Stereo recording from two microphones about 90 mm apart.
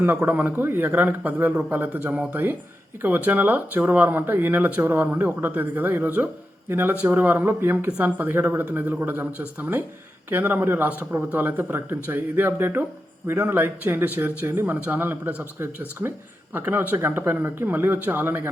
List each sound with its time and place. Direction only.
0.0 s speech: 20° right (ahead or behind)